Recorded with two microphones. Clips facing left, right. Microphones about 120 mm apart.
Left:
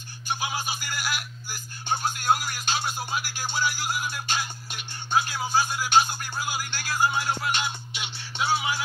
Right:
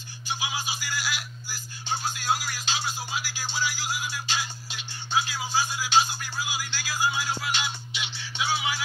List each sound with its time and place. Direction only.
0.3 s music: 55° left (ahead or behind)